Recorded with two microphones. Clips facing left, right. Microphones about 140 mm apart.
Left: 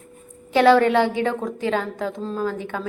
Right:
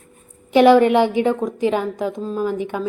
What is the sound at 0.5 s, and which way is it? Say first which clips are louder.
A woman's voice: right 3 dB; 15° right (ahead or behind).